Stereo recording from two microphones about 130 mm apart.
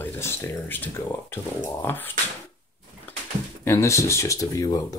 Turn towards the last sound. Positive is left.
turn(degrees=30)  # may be behind; listen again after turning